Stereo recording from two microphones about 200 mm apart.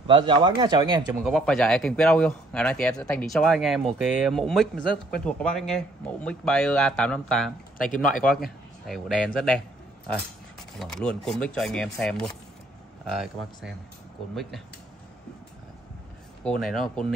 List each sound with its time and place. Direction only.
0.0 s speech: 25° right (ahead or behind)
1.2 s speech: centre (ahead or behind)
7.7 s speech: 45° left (ahead or behind)
8.8 s speech: centre (ahead or behind)
10.8 s speech: centre (ahead or behind)
16.4 s speech: 5° left (ahead or behind)